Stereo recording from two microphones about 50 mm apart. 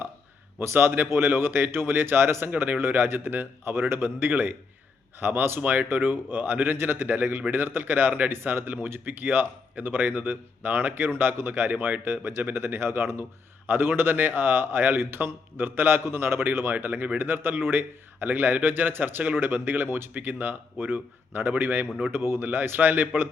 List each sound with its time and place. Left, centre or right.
0.6 s speech: right
12.4 s speech: right
12.6 s speech: right